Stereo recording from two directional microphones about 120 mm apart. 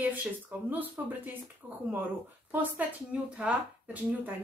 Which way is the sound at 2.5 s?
15° right (ahead or behind).